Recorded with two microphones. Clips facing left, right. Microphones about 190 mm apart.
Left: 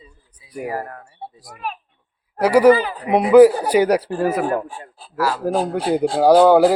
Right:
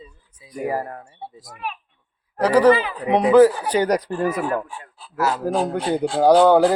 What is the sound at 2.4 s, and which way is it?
Speech, 10° left (ahead or behind).